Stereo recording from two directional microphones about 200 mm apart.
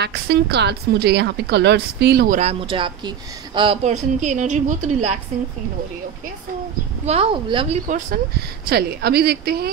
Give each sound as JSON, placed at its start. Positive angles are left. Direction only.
{"t": 0.0, "sound": "a woman's voice", "side_deg": -55}
{"t": 2.6, "sound": "speech", "side_deg": -25}
{"t": 7.1, "sound": "a woman's voice", "side_deg": -30}
{"t": 8.1, "sound": "speech", "side_deg": -50}